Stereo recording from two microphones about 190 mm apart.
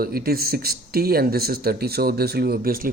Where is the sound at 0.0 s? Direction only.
50° right (ahead or behind).